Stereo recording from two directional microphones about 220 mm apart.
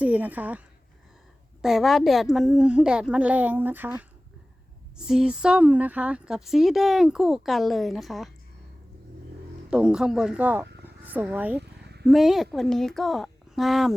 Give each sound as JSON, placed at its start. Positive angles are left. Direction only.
{"t": 0.0, "sound": "a woman's voice", "side_deg": -5}
{"t": 1.6, "sound": "a woman's voice", "side_deg": 0}
{"t": 9.6, "sound": "a woman's voice", "side_deg": -5}
{"t": 11.6, "sound": "a sound", "side_deg": -50}
{"t": 12.0, "sound": "a woman's voice", "side_deg": 0}